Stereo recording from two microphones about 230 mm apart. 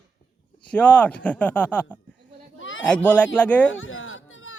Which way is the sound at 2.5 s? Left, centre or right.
Left.